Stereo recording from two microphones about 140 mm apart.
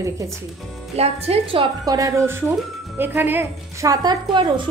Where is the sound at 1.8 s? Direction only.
25° right (ahead or behind).